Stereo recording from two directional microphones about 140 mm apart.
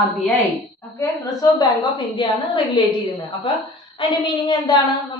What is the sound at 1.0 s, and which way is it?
A woman's voice, 25° left (ahead or behind).